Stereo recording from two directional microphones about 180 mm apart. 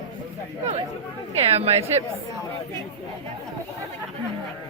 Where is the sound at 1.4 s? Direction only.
35° right (ahead or behind).